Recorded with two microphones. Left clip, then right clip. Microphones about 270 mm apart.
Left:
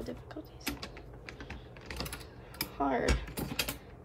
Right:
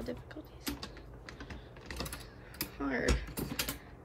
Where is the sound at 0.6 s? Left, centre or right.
Centre.